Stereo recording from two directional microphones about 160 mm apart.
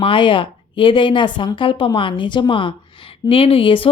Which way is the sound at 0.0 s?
30° left (ahead or behind).